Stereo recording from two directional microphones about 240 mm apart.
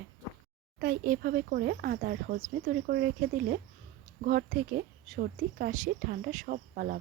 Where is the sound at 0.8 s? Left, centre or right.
Right.